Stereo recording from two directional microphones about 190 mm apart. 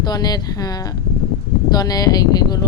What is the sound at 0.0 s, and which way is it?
A woman's voice, 20° left (ahead or behind).